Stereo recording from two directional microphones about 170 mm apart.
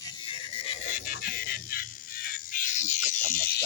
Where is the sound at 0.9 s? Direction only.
60° left (ahead or behind).